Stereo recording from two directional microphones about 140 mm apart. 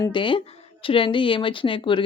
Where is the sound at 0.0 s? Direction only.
35° left (ahead or behind).